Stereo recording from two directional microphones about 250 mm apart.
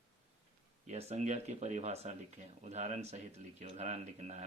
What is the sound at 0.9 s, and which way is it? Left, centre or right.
Speech, right.